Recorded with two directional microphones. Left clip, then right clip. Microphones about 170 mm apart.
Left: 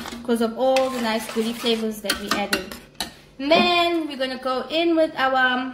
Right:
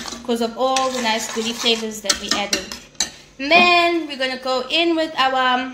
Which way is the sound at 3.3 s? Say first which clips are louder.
Right 4 dB; 65° left (ahead or behind).